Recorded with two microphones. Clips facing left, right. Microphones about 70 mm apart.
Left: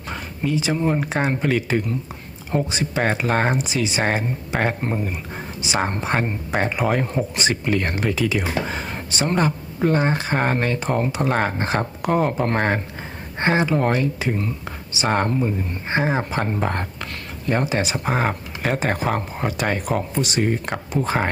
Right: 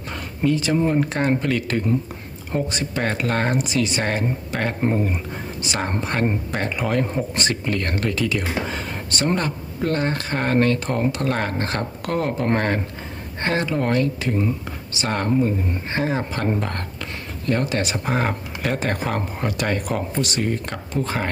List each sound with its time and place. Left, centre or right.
0.4 s speech: centre
4.9 s speech: centre
5.6 s speech: centre
15.9 s speech: left
17.8 s speech: centre
20.1 s speech: centre